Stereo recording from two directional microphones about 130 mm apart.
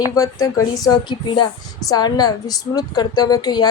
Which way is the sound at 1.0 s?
35° left (ahead or behind).